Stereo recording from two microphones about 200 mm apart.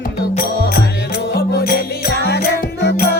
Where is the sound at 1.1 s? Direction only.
55° left (ahead or behind).